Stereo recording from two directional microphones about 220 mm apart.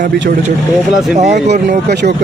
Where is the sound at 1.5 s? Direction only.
45° right (ahead or behind).